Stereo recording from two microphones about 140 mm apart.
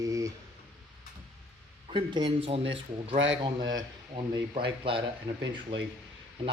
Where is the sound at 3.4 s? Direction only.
30° right (ahead or behind).